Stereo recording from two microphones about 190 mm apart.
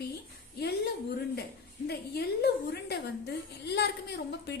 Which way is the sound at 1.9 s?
60° left (ahead or behind).